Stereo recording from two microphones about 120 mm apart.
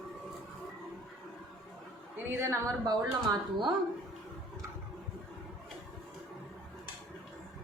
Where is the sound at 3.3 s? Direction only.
35° right (ahead or behind).